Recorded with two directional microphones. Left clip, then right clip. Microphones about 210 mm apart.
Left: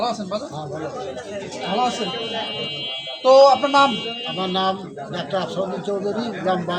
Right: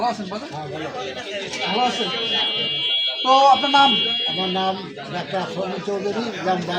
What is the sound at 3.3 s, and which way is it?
Speech, 20° left (ahead or behind).